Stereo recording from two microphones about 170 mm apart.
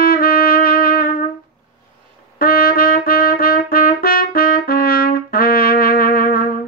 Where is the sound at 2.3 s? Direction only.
60° left (ahead or behind).